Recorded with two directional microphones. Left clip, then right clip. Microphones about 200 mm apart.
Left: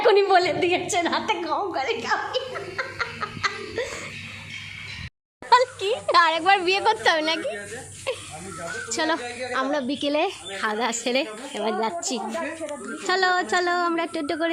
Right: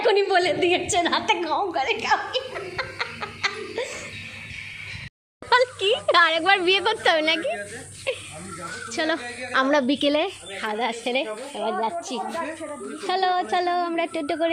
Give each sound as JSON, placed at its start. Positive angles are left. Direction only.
{"t": 0.0, "sound": "a woman's voice", "side_deg": 10}
{"t": 5.5, "sound": "speech", "side_deg": -5}
{"t": 8.1, "sound": "a sound", "side_deg": 0}
{"t": 8.9, "sound": "a woman's voice", "side_deg": 0}
{"t": 9.5, "sound": "a woman's voice", "side_deg": -20}
{"t": 10.2, "sound": "a woman's voice", "side_deg": 10}